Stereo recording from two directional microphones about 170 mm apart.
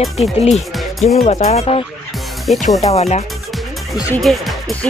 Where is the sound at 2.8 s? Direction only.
40° left (ahead or behind).